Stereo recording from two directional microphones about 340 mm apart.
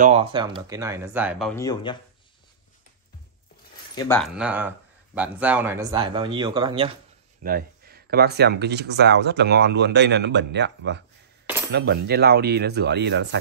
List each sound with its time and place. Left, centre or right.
0.0 s speech: centre
1.5 s speech: centre
3.9 s speech: centre
4.2 s speech: centre
7.4 s speech: right